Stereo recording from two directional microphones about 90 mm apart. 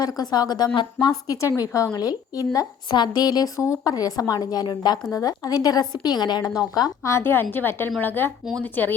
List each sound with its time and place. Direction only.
0.0 s a woman's voice: 50° left (ahead or behind)
1.0 s speech: 40° left (ahead or behind)
2.9 s a woman's voice: 50° left (ahead or behind)
7.1 s a woman's voice: 30° left (ahead or behind)